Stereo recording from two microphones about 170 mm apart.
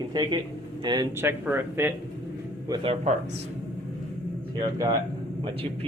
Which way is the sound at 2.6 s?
25° right (ahead or behind).